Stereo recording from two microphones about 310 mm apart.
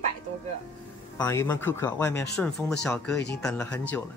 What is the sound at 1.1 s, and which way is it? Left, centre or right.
Speech, centre.